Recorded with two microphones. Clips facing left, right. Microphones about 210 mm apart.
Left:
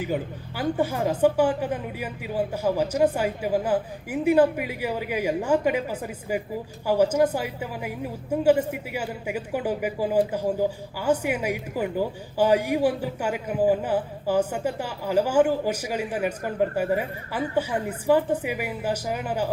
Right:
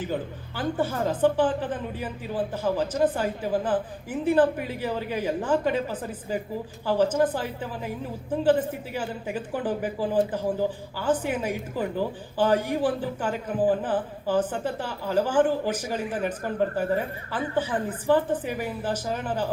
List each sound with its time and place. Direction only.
0.0 s a woman's voice: 10° left (ahead or behind)